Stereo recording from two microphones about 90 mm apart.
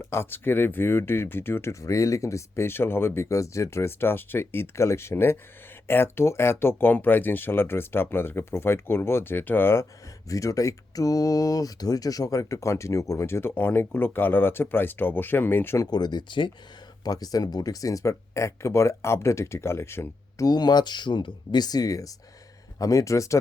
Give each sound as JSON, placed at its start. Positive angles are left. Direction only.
{"t": 0.0, "sound": "speech", "side_deg": 30}
{"t": 10.2, "sound": "speech", "side_deg": 40}
{"t": 15.9, "sound": "speech", "side_deg": 50}
{"t": 17.0, "sound": "speech", "side_deg": 45}
{"t": 20.4, "sound": "speech", "side_deg": 50}